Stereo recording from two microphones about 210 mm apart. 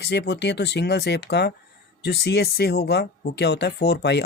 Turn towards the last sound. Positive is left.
turn(degrees=50)  # may be behind; listen again after turning